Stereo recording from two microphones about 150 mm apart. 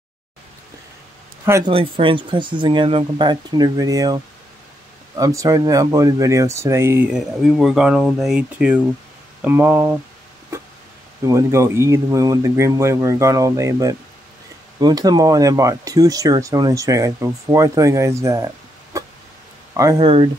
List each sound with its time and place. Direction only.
1.6 s speech: 35° right (ahead or behind); by 7.1 s 15° right (ahead or behind)
7.1 s speech: 5° right (ahead or behind)
11.2 s speech: 20° right (ahead or behind)
20.0 s speech: 40° right (ahead or behind)